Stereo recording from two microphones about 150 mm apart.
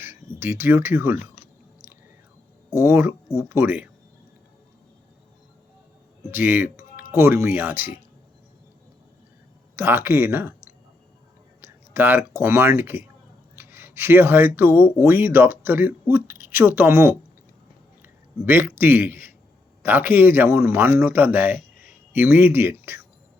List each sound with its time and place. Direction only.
0.0 s speech: 15° right (ahead or behind)
2.8 s speech: 15° right (ahead or behind)
6.3 s speech: 15° right (ahead or behind)
9.7 s speech: 15° right (ahead or behind)
11.6 s a sound: 15° right (ahead or behind)
12.4 s a man's voice: 15° right (ahead or behind)